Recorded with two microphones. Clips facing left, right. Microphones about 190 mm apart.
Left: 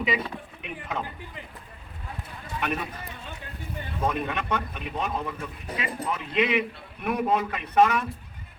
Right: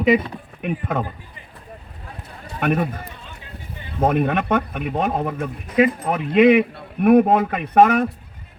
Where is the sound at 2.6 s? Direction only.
50° right (ahead or behind).